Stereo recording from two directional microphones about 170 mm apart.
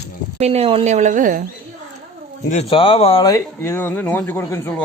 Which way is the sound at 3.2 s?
15° left (ahead or behind).